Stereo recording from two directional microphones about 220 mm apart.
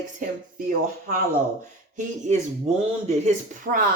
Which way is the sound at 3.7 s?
45° right (ahead or behind).